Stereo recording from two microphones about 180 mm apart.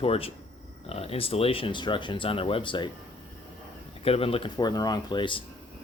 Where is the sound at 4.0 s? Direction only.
30° left (ahead or behind).